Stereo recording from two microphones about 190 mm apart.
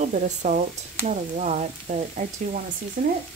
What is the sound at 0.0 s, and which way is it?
Speech, 40° right (ahead or behind).